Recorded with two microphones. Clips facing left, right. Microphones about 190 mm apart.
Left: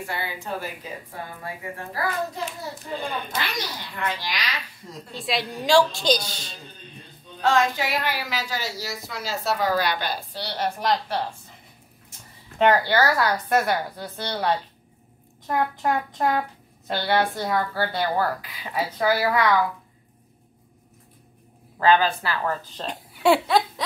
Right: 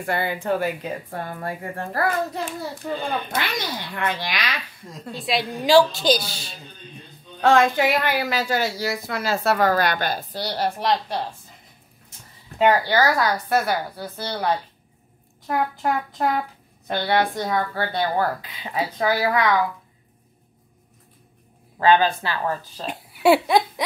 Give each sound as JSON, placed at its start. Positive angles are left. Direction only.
{"t": 0.0, "sound": "speech", "side_deg": -55}
{"t": 5.1, "sound": "a woman's voice", "side_deg": 0}
{"t": 7.4, "sound": "speech", "side_deg": -55}
{"t": 12.5, "sound": "a woman's voice", "side_deg": -10}
{"t": 16.8, "sound": "a woman's voice", "side_deg": -20}
{"t": 21.7, "sound": "speech", "side_deg": -20}